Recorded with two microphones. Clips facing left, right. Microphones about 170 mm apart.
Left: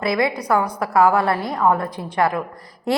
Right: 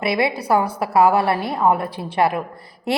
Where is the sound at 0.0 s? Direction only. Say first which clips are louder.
Even; 25° right (ahead or behind).